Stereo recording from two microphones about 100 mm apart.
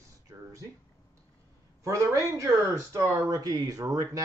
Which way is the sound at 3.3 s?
40° right (ahead or behind).